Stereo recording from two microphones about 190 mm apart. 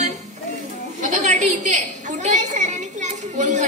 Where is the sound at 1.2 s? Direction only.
40° right (ahead or behind).